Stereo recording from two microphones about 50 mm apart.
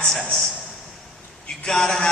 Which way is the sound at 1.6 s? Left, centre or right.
Centre.